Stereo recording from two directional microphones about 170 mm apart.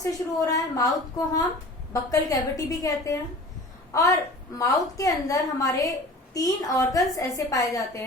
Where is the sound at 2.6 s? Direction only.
20° left (ahead or behind).